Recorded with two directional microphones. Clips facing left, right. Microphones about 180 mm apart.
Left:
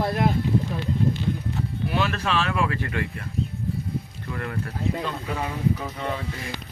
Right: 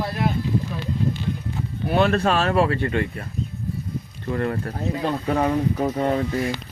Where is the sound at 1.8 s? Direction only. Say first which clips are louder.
Right 8 dB; 50° right (ahead or behind).